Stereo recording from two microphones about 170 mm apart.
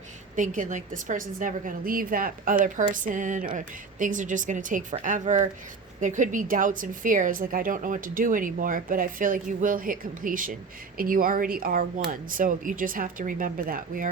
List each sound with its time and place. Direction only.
0.3 s a woman's voice: 50° right (ahead or behind)